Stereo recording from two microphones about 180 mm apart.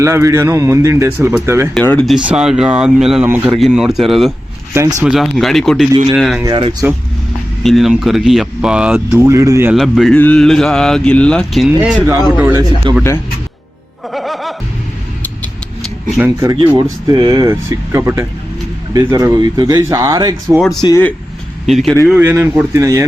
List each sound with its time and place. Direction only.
0.0 s speech: 15° right (ahead or behind)
1.7 s speech: 10° left (ahead or behind)
2.1 s speech: 5° right (ahead or behind)
4.7 s speech: 15° right (ahead or behind)
5.0 s speech: centre (ahead or behind)
6.4 s speech: 30° right (ahead or behind)
7.6 s speech: centre (ahead or behind)
9.7 s speech: centre (ahead or behind)
12.4 s speech: 15° right (ahead or behind)
12.9 s speech: 25° right (ahead or behind)
14.1 s music: centre (ahead or behind)
16.2 s speech: 20° right (ahead or behind)
20.6 s speech: centre (ahead or behind)
22.1 s speech: 10° right (ahead or behind)